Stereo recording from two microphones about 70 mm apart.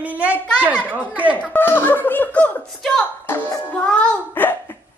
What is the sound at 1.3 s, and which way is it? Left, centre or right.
Speech, left.